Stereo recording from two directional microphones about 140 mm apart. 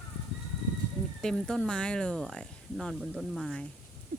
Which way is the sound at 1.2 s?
5° left (ahead or behind).